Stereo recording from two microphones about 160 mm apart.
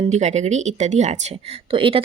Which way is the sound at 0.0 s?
45° right (ahead or behind).